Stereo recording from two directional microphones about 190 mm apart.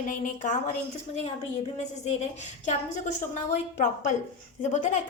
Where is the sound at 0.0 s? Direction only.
40° left (ahead or behind).